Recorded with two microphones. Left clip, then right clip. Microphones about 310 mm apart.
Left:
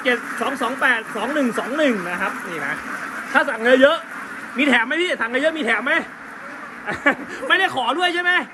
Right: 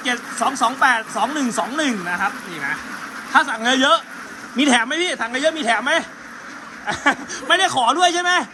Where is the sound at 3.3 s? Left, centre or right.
Centre.